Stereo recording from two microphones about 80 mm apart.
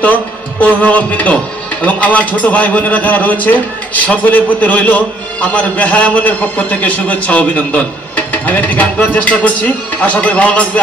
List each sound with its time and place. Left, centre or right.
0.6 s a man's voice: centre